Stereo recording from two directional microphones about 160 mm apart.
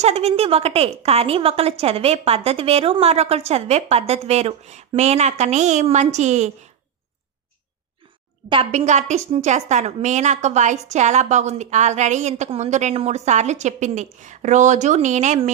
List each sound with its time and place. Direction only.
0.0 s a woman's voice: 40° right (ahead or behind)
8.5 s a woman's voice: 35° right (ahead or behind)
8.8 s a woman's voice: 45° right (ahead or behind)